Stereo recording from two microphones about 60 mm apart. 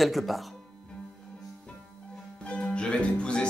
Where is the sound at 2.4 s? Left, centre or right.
Centre.